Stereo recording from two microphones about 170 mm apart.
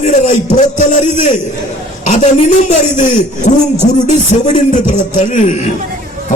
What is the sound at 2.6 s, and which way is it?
A man's voice, 45° left (ahead or behind).